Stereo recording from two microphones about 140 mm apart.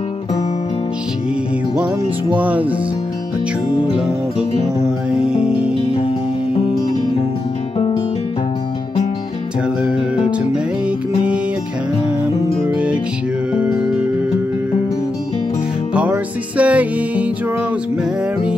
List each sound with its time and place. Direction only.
2.3 s music: 10° right (ahead or behind)
4.4 s music: 5° right (ahead or behind)
5.9 s music: 45° left (ahead or behind)
12.6 s music: 10° right (ahead or behind)
15.9 s music: 10° right (ahead or behind)